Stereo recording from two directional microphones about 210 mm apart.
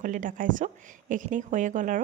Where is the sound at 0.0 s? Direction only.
40° right (ahead or behind).